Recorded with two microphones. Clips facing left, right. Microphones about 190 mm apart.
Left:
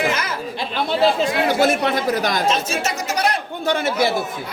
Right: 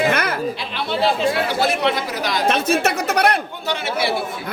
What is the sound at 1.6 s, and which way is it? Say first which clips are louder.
Speech: left 2 dB; 45° left (ahead or behind).